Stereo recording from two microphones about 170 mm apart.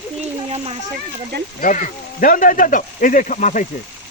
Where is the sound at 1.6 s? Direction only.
50° left (ahead or behind).